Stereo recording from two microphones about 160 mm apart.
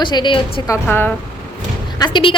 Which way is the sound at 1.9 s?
25° left (ahead or behind).